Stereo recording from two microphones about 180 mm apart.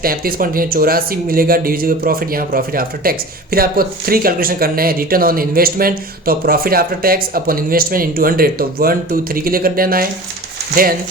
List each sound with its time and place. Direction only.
0.0 s speech: 55° right (ahead or behind)